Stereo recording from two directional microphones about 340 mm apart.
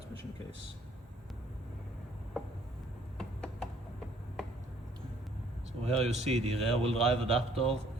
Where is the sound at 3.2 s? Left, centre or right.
Centre.